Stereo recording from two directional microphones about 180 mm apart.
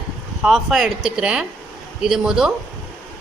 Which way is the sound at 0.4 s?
Centre (ahead or behind).